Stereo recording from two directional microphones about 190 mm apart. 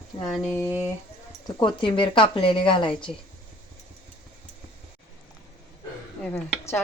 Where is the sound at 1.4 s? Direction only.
25° left (ahead or behind).